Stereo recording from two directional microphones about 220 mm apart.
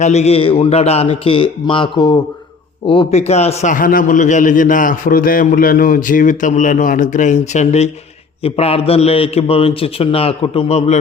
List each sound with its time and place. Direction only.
0.0 s a man's voice: 30° left (ahead or behind)